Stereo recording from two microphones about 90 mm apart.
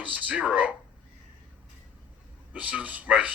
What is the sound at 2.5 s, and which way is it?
Speech, 15° right (ahead or behind).